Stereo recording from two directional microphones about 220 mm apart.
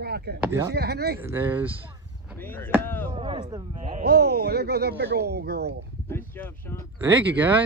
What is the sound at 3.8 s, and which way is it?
Speech, 35° right (ahead or behind).